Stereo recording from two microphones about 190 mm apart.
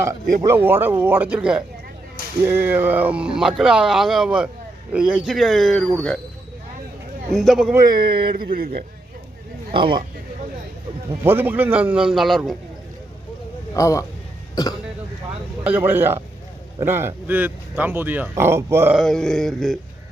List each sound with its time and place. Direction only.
0.4 s speech: 10° right (ahead or behind)
7.3 s speech: centre (ahead or behind)
8.3 s speech: 50° right (ahead or behind)
9.7 s speech: 25° right (ahead or behind)
11.2 s speech: 10° right (ahead or behind)
13.7 s a man's voice: 15° left (ahead or behind)
15.6 s speech: 10° right (ahead or behind)
18.9 s speech: centre (ahead or behind)